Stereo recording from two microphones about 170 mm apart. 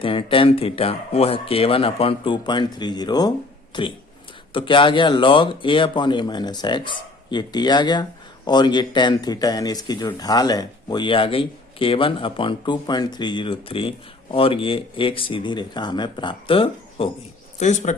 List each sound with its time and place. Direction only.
0.0 s speech: 30° left (ahead or behind)
17.6 s speech: 45° left (ahead or behind)